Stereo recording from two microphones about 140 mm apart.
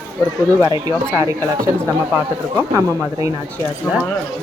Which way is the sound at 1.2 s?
20° right (ahead or behind).